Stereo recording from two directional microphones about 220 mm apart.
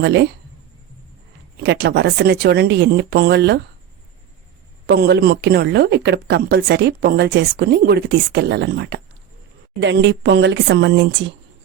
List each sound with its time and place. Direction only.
0.0 s a woman's voice: 50° right (ahead or behind)
1.6 s a woman's voice: 50° right (ahead or behind)
4.9 s a woman's voice: 45° right (ahead or behind)